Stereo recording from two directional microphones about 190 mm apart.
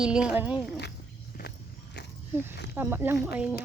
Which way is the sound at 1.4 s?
55° left (ahead or behind).